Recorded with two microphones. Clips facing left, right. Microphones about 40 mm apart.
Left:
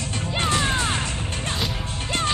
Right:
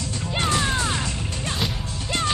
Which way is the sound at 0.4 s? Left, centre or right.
Left.